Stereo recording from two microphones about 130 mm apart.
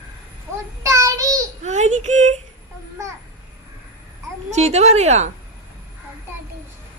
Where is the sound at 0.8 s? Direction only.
25° right (ahead or behind).